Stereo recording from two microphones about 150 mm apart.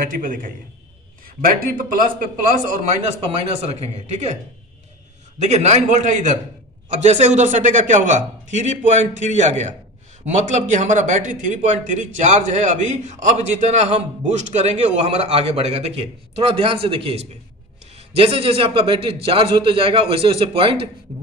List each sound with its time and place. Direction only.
0.0 s a man's voice: 65° right (ahead or behind)
1.4 s a man's voice: 75° right (ahead or behind); by 4.4 s 50° right (ahead or behind)
5.4 s a man's voice: 50° right (ahead or behind)